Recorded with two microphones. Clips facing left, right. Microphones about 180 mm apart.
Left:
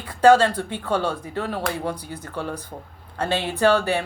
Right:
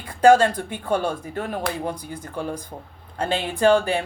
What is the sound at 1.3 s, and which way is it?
Speech, 50° right (ahead or behind).